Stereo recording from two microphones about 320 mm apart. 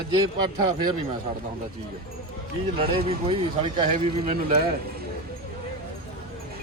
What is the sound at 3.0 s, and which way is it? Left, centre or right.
Speech, centre.